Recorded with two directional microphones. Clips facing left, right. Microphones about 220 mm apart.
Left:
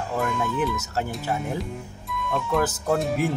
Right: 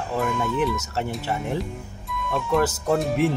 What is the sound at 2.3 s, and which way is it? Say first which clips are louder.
Speech: right 2 dB; centre (ahead or behind).